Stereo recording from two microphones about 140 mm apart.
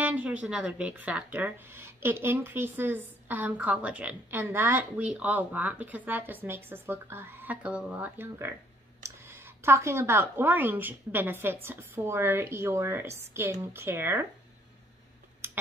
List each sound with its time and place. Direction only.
0.0 s speech: 10° right (ahead or behind)